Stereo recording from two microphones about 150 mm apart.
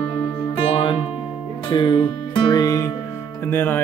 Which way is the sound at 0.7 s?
30° left (ahead or behind).